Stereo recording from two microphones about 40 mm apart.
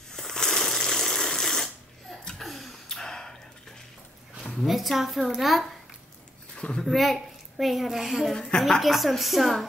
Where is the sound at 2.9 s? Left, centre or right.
Centre.